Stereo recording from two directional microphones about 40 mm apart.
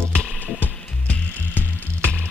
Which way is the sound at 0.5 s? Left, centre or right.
Left.